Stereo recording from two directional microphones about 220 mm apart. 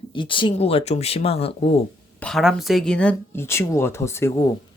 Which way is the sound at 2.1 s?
Centre (ahead or behind).